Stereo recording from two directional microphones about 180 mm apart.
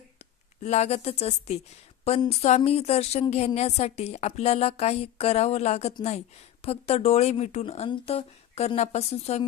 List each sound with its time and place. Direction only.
0.6 s speech: 40° left (ahead or behind)